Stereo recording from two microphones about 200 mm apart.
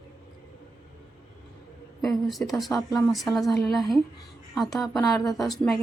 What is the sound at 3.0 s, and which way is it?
Speech, centre (ahead or behind).